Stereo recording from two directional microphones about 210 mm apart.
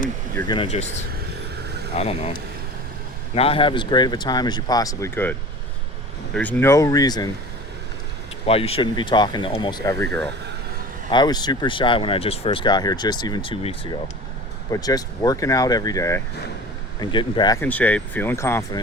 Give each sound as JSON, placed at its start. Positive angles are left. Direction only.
{"t": 0.4, "sound": "speech", "side_deg": 25}
{"t": 1.6, "sound": "vehicle", "side_deg": -50}
{"t": 2.0, "sound": "speech", "side_deg": 30}
{"t": 3.3, "sound": "speech", "side_deg": 25}
{"t": 8.4, "sound": "speech", "side_deg": 30}
{"t": 11.1, "sound": "speech", "side_deg": 20}